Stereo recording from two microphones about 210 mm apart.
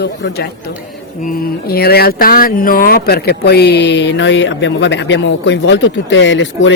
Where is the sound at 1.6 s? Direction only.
50° left (ahead or behind).